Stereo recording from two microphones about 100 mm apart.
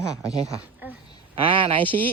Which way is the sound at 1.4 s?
60° right (ahead or behind).